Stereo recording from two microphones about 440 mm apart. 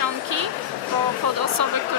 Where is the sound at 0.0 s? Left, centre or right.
Right.